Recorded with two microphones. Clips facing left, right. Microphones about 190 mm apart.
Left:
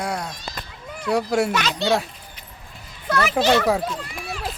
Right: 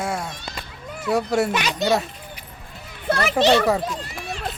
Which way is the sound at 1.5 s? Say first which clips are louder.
Even; 15° right (ahead or behind).